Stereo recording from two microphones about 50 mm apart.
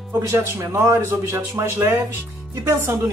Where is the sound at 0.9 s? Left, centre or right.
Right.